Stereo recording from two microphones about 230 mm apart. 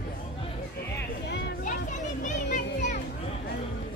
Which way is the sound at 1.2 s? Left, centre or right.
Left.